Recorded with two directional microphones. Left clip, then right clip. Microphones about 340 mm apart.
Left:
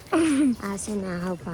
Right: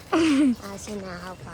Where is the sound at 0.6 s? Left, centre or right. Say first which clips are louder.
Left 4 dB; left.